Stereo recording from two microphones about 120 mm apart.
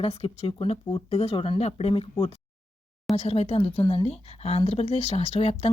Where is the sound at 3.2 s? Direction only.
60° left (ahead or behind).